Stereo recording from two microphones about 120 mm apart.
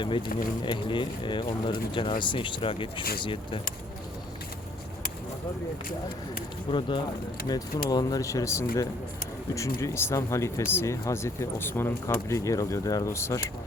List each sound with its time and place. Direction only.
0.0 s speech: 40° left (ahead or behind)
6.7 s speech: 45° left (ahead or behind)
7.4 s speech: 35° left (ahead or behind)